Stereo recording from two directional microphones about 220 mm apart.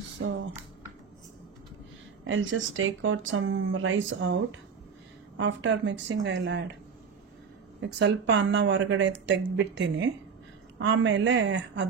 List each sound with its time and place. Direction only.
2.2 s speech: 60° right (ahead or behind)
7.8 s speech: 55° right (ahead or behind)